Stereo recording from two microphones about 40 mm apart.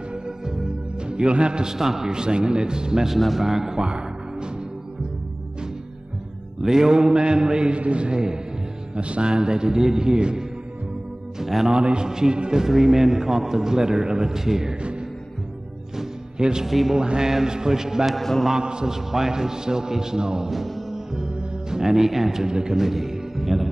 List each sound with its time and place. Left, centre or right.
1.0 s a man's voice: right
3.2 s a man's voice: centre
3.8 s music: right
6.6 s a man's voice: centre
11.7 s a man's voice: right
16.0 s music: centre
16.6 s a man's voice: centre
16.9 s a man's voice: centre
18.1 s a man's voice: centre
18.5 s a man's voice: right
20.5 s music: centre
20.9 s music: centre
21.4 s a man's voice: centre